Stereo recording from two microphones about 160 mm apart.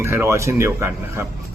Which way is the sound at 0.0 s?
15° right (ahead or behind).